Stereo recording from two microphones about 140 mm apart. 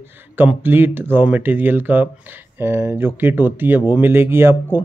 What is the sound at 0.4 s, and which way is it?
A man's voice, 15° right (ahead or behind).